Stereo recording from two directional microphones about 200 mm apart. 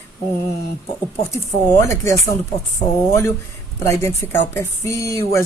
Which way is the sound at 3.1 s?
15° left (ahead or behind).